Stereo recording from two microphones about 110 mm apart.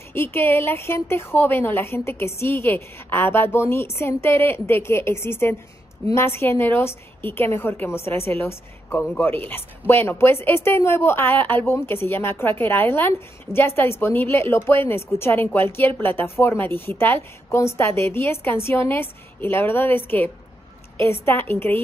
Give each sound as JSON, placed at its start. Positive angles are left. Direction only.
{"t": 0.1, "sound": "a woman's voice", "side_deg": 20}